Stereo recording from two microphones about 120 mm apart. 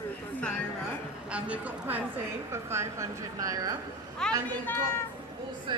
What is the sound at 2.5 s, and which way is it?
A woman's voice, 20° right (ahead or behind).